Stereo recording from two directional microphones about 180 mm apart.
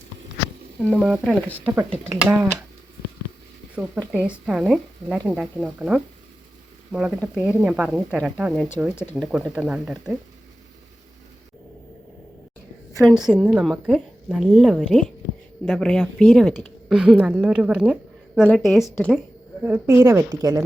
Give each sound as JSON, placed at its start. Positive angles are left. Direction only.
{"t": 0.8, "sound": "a woman's voice", "side_deg": 0}
{"t": 1.6, "sound": "speech", "side_deg": -20}
{"t": 4.1, "sound": "a woman's voice", "side_deg": -5}
{"t": 13.0, "sound": "a woman's voice", "side_deg": 0}
{"t": 19.6, "sound": "speech", "side_deg": -15}